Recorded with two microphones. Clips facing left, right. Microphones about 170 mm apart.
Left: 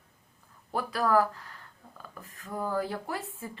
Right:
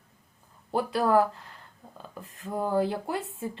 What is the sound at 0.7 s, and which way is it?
Speech, 25° right (ahead or behind).